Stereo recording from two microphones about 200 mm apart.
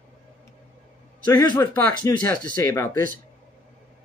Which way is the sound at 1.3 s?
20° left (ahead or behind).